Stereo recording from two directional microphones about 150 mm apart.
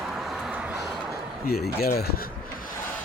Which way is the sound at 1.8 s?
90° left.